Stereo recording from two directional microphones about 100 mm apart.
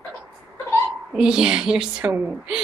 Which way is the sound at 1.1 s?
5° right (ahead or behind).